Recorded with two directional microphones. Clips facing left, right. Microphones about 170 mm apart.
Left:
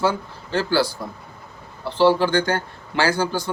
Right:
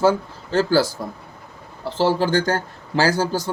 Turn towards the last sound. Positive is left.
turn(degrees=-40)  # may be behind; listen again after turning